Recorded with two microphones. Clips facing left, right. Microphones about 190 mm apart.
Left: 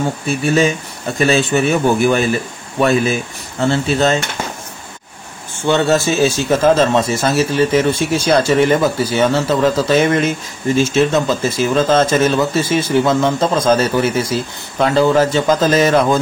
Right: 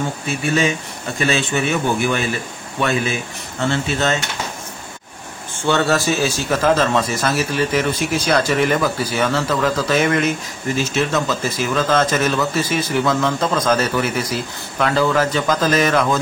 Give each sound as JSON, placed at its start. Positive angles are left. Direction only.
{"t": 1.2, "sound": "a man's voice", "side_deg": 40}
{"t": 5.7, "sound": "speech", "side_deg": 20}